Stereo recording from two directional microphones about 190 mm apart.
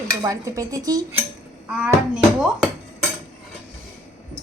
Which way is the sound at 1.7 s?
5° right (ahead or behind).